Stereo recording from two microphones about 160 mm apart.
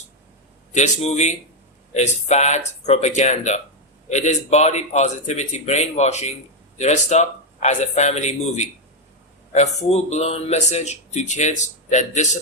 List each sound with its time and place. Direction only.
0.7 s speech: 45° left (ahead or behind)